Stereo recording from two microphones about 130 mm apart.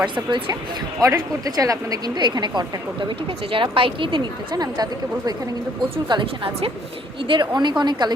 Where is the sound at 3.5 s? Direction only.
45° right (ahead or behind).